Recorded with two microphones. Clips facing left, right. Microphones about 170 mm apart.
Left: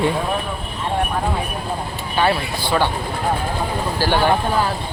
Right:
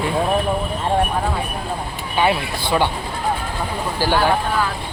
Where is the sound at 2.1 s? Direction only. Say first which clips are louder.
Even; 15° right (ahead or behind).